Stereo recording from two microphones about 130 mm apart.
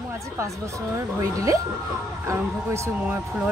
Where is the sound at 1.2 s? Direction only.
25° right (ahead or behind).